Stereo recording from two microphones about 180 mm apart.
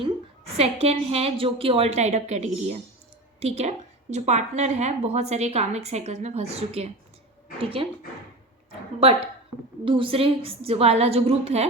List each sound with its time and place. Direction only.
0.5 s a woman's voice: 35° right (ahead or behind)
9.0 s a woman's voice: 35° right (ahead or behind)